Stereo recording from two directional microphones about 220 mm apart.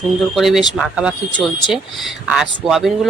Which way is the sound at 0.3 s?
Centre (ahead or behind).